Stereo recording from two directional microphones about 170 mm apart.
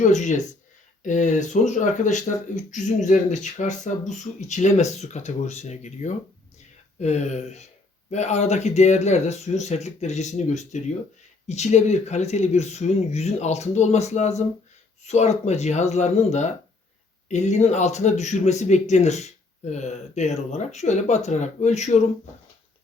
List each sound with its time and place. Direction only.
0.0 s speech: 45° left (ahead or behind)